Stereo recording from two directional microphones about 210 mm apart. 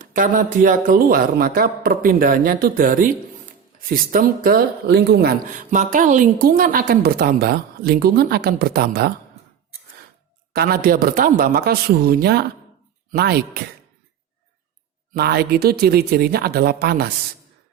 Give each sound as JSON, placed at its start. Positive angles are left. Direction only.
{"t": 0.0, "sound": "speech", "side_deg": -40}
{"t": 10.5, "sound": "speech", "side_deg": -50}
{"t": 15.1, "sound": "speech", "side_deg": -50}